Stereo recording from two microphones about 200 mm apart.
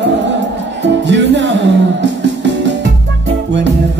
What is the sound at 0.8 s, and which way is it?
Music, 60° right (ahead or behind).